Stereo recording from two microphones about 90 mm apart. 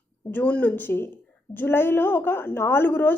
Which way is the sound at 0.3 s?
20° left (ahead or behind).